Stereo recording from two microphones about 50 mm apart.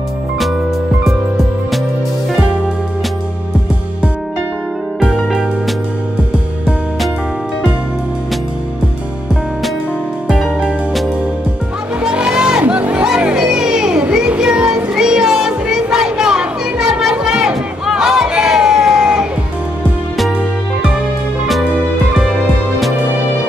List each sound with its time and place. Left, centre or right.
12.0 s music: centre
13.0 s music: centre
14.1 s a sound: centre